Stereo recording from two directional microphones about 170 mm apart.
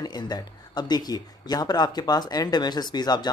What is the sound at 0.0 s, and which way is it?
Speech, 25° left (ahead or behind).